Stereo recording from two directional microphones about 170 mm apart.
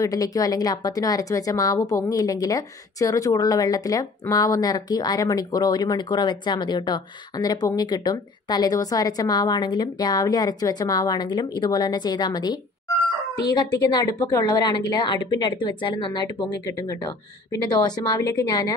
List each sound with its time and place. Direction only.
0.0 s a woman's voice: 20° left (ahead or behind)